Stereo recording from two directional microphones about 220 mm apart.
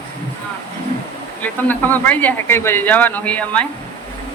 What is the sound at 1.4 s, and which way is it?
Speech, 10° left (ahead or behind).